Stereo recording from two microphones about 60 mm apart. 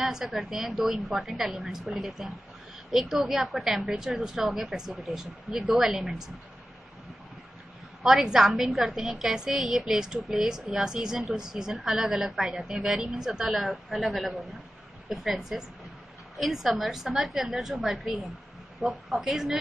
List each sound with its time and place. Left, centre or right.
0.0 s a woman's voice: centre
8.0 s a woman's voice: centre